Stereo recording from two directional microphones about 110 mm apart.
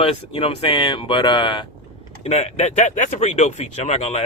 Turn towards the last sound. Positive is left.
turn(degrees=85)